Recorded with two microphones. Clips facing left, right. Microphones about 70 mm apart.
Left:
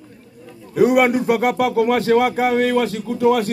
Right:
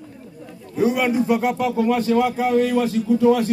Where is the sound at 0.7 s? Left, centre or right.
Left.